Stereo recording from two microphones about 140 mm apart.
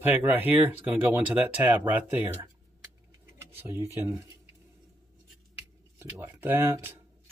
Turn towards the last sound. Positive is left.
turn(degrees=-15)  # may be behind; listen again after turning